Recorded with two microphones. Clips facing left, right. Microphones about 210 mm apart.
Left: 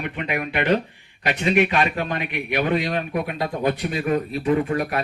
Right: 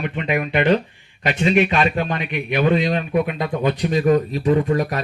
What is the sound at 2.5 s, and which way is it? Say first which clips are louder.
Speech: right 4 dB; 25° right (ahead or behind).